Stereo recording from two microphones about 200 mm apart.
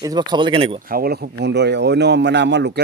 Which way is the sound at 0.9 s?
50° right (ahead or behind).